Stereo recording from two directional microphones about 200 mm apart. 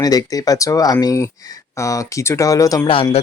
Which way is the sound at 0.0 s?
20° left (ahead or behind).